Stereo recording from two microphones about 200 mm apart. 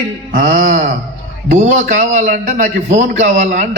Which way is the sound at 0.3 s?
40° right (ahead or behind).